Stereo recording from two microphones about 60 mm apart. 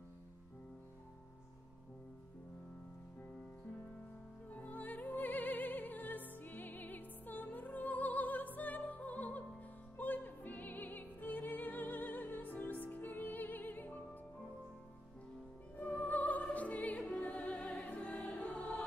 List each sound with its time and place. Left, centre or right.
4.5 s music: left
9.9 s opera: left
15.8 s music: left